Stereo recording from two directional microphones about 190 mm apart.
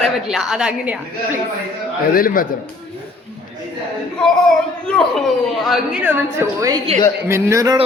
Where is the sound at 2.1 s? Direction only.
50° left (ahead or behind).